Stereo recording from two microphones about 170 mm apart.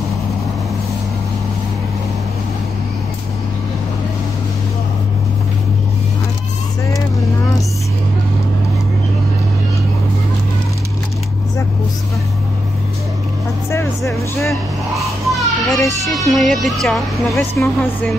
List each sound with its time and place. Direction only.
13.7 s vehicle: 15° left (ahead or behind)
15.0 s children playing: centre (ahead or behind)
16.2 s speech: centre (ahead or behind)
17.4 s speech: 15° left (ahead or behind)